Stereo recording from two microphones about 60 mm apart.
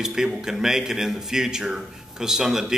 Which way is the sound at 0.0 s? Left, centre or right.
Centre.